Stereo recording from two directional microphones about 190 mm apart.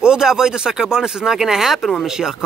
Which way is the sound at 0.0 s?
5° right (ahead or behind).